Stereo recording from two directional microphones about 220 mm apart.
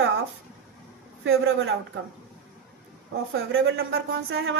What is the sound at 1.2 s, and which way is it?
Speech, 65° right (ahead or behind).